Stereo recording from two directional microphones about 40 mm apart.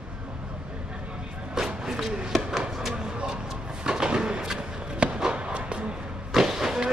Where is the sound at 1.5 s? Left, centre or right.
Centre.